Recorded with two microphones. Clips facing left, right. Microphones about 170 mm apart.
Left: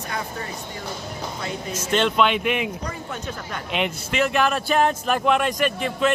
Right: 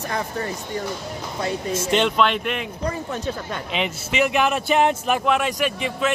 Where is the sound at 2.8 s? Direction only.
30° right (ahead or behind).